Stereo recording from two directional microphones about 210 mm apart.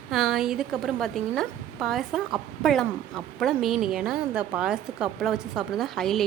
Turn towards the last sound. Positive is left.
turn(degrees=0)  # may be behind; listen again after turning